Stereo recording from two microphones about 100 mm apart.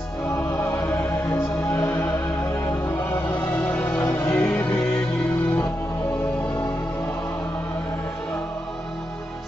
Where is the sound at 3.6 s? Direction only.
15° left (ahead or behind).